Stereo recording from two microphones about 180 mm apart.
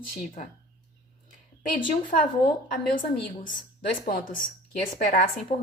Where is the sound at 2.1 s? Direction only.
45° left (ahead or behind).